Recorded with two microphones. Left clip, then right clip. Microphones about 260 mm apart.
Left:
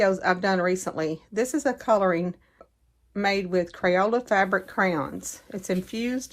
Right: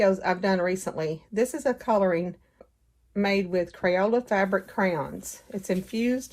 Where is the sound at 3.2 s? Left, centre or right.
Left.